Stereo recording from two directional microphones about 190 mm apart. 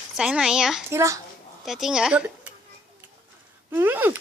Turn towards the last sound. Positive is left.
turn(degrees=-10)  # may be behind; listen again after turning